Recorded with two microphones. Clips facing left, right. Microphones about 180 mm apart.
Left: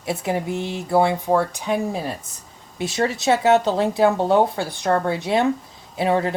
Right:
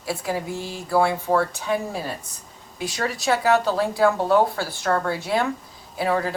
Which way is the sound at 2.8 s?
25° left (ahead or behind).